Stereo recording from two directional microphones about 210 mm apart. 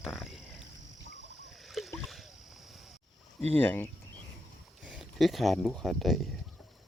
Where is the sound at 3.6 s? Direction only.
10° left (ahead or behind).